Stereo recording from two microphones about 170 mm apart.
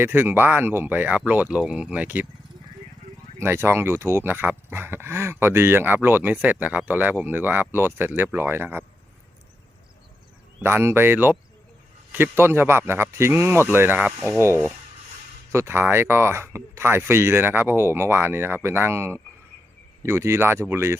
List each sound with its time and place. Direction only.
0.0 s speech: 10° right (ahead or behind)
3.4 s speech: 15° right (ahead or behind)
10.6 s speech: 15° right (ahead or behind)